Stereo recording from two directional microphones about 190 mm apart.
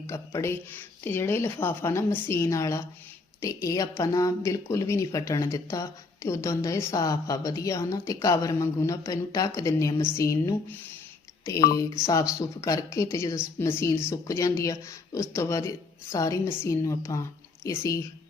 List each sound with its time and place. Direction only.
0.1 s speech: 15° left (ahead or behind)
12.0 s speech: 15° left (ahead or behind)